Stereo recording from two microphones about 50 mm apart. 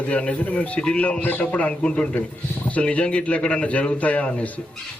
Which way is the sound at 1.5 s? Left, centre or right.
Left.